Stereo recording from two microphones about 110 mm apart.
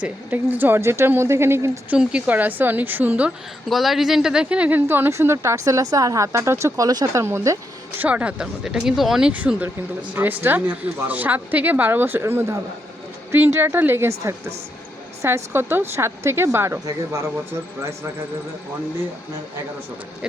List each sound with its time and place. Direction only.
0.0 s speech: 15° right (ahead or behind)
1.9 s speech: 10° right (ahead or behind)
3.7 s speech: centre (ahead or behind); by 7.6 s 25° right (ahead or behind)
7.9 s speech: 15° right (ahead or behind)
15.2 s speech: 25° right (ahead or behind)